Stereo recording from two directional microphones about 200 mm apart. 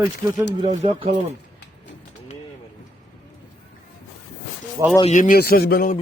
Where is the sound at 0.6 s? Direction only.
35° right (ahead or behind).